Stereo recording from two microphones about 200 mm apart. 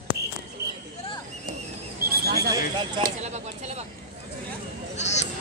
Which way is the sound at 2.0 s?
50° right (ahead or behind).